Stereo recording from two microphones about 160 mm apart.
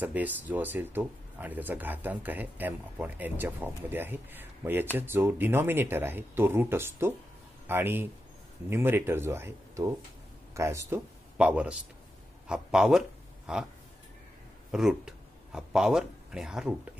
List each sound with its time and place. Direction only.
0.0 s speech: 10° right (ahead or behind)
14.7 s speech: 5° right (ahead or behind)